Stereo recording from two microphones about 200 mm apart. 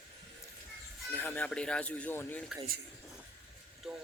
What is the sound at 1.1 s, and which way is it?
Speech, 10° left (ahead or behind).